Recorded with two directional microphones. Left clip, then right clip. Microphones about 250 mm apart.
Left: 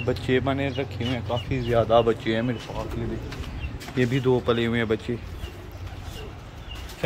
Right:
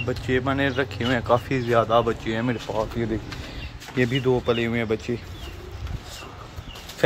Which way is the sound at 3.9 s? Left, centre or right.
Centre.